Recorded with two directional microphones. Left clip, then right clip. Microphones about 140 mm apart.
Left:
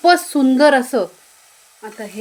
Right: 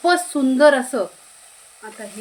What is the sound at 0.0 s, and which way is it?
Speech, 65° left (ahead or behind).